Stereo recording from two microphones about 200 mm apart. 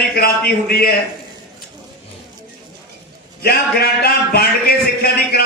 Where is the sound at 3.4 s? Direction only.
50° left (ahead or behind).